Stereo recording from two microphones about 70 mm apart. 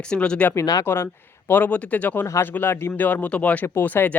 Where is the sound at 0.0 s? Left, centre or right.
Centre.